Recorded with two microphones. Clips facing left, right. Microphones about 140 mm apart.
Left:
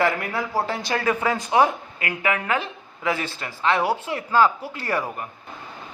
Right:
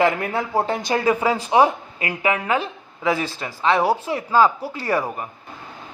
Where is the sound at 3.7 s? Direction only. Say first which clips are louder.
Right 3 dB; 35° right (ahead or behind).